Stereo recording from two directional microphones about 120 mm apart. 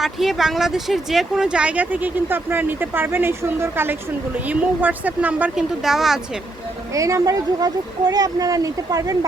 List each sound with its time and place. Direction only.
0.0 s speech: centre (ahead or behind)
6.9 s speech: 30° right (ahead or behind)